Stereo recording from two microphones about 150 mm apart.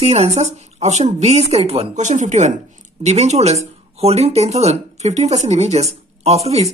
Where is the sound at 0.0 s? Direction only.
45° right (ahead or behind).